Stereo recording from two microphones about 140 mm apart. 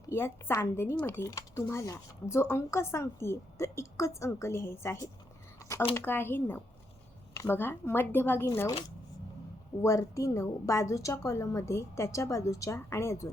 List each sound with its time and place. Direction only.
0.1 s speech: 20° left (ahead or behind)
9.8 s speech: 20° left (ahead or behind)